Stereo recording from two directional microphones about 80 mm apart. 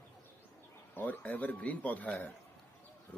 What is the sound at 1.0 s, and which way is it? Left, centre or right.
Speech, left.